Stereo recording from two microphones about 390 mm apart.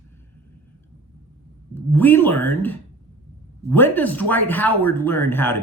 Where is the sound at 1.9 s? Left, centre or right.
Centre.